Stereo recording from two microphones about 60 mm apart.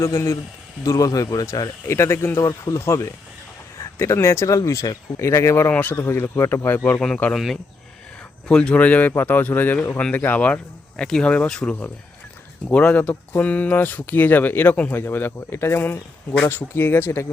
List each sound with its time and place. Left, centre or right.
0.0 s speech: left
0.9 s speech: left
1.9 s speech: left
2.4 s speech: left
2.7 s speech: left
5.7 s speech: left
6.7 s speech: left
7.3 s speech: centre
8.7 s speech: left